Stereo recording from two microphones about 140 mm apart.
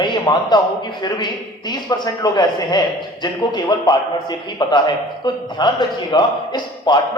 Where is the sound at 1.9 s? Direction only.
30° left (ahead or behind).